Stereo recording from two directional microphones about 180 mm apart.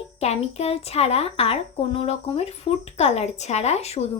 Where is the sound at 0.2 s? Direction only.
35° left (ahead or behind).